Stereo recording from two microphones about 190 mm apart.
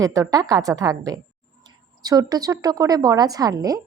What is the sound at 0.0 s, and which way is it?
A woman's voice, 15° right (ahead or behind).